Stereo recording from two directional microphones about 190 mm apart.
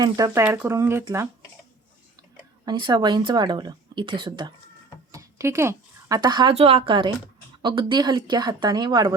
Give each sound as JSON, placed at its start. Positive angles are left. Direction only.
{"t": 0.0, "sound": "speech", "side_deg": -15}
{"t": 2.6, "sound": "speech", "side_deg": -20}